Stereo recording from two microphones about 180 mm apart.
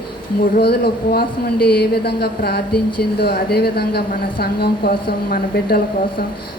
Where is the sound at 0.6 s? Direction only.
60° left (ahead or behind).